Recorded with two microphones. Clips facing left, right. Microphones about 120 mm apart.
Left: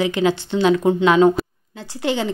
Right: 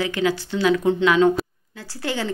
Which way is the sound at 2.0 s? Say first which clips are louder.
Left 5 dB; 20° left (ahead or behind).